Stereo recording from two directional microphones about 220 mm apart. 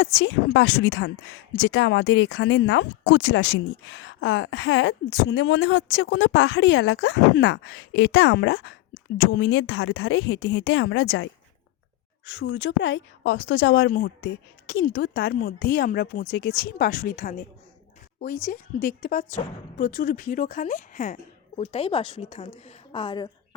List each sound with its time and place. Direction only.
0.0 s a woman's voice: 55° left (ahead or behind)
12.4 s a woman's voice: 50° left (ahead or behind)
15.4 s speech: 40° left (ahead or behind)
18.4 s a woman's voice: 40° left (ahead or behind); by 23.3 s 20° left (ahead or behind)